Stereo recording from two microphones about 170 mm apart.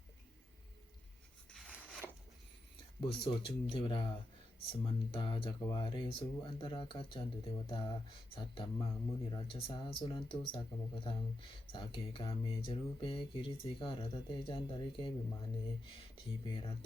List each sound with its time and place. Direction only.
1.5 s a sound: centre (ahead or behind)
3.0 s speech: 30° left (ahead or behind)
4.7 s mantra: 30° left (ahead or behind)
8.4 s speech: 30° left (ahead or behind)
11.7 s mantra: 30° left (ahead or behind)